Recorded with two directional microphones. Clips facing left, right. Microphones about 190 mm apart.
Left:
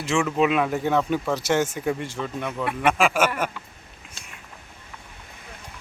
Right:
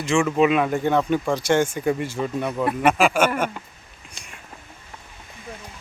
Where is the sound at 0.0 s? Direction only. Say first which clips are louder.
Right 3 dB; 5° left (ahead or behind).